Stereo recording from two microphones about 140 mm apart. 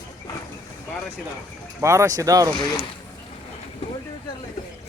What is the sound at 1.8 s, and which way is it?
Speech, 20° right (ahead or behind).